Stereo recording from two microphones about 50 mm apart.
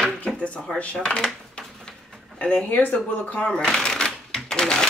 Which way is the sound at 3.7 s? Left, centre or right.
Centre.